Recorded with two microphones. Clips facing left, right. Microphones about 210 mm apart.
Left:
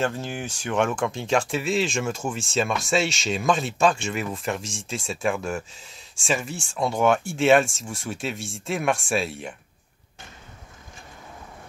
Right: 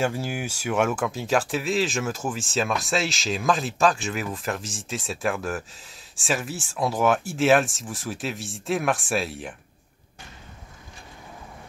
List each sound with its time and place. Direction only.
0.0 s speech: 10° right (ahead or behind)